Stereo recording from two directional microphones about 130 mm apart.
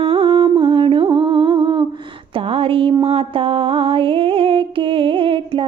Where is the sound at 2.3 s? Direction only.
45° right (ahead or behind).